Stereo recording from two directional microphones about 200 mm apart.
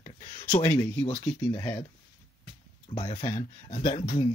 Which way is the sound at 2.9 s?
30° left (ahead or behind).